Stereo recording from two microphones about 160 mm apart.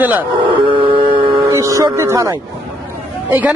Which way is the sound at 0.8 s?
35° right (ahead or behind).